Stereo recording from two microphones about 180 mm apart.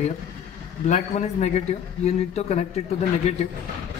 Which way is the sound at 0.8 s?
40° left (ahead or behind).